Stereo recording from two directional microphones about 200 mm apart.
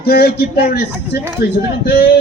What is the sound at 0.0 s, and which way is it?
Speech, 50° left (ahead or behind).